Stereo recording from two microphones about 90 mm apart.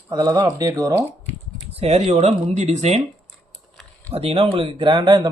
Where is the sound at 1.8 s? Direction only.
90° right.